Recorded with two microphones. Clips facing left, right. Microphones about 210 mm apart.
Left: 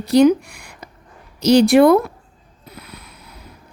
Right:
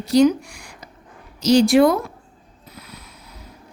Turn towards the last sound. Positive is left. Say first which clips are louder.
# left 2 dB
turn(degrees=60)  # may be behind; listen again after turning